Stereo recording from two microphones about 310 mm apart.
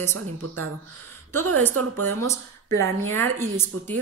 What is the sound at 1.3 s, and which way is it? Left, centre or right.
Speech, right.